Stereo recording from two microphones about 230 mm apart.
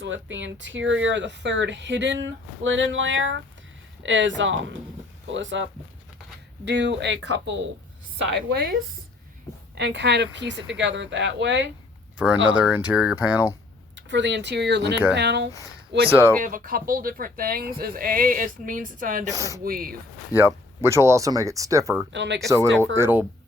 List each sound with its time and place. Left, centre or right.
0.0 s speech: right
6.7 s speech: right
8.3 s speech: right
9.7 s speech: right
12.1 s speech: centre
13.9 s speech: right
16.4 s speech: right
19.3 s speech: centre
19.6 s speech: right
20.3 s speech: centre
22.1 s speech: right
22.4 s speech: centre